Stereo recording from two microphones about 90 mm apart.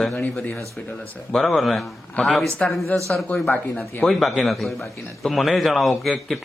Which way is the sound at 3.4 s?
20° left (ahead or behind).